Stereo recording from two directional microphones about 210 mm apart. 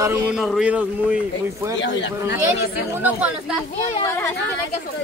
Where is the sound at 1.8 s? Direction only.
60° left (ahead or behind).